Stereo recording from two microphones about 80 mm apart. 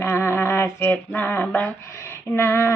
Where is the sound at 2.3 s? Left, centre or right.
Left.